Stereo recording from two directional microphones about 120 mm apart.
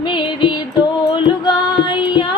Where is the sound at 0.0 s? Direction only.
40° left (ahead or behind).